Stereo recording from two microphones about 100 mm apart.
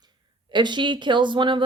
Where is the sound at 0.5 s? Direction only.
50° right (ahead or behind).